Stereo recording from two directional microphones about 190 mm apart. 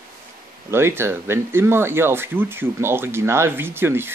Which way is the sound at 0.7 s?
15° right (ahead or behind).